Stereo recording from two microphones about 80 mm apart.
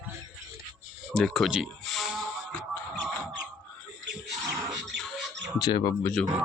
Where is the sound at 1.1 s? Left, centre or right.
Centre.